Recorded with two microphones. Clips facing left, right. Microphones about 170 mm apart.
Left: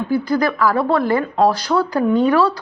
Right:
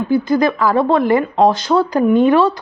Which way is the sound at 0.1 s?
20° right (ahead or behind).